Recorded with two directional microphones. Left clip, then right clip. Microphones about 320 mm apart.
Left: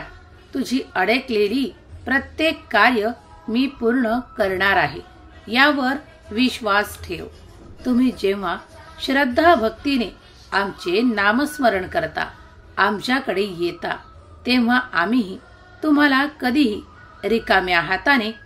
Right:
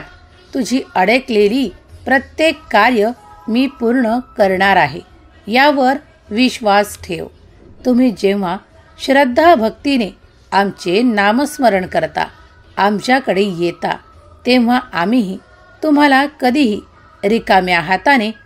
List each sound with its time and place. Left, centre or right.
0.5 s a woman's voice: right